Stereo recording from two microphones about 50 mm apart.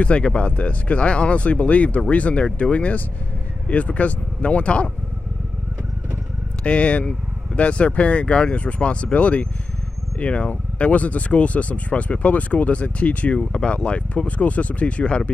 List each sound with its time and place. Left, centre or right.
0.0 s speech: left
6.6 s speech: left